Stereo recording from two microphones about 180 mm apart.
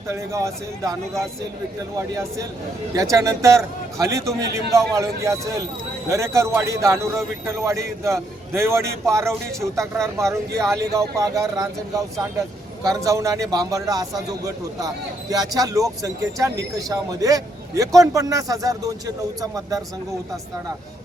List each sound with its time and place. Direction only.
0.1 s a man's voice: 15° right (ahead or behind)
2.9 s a man's voice: 15° right (ahead or behind)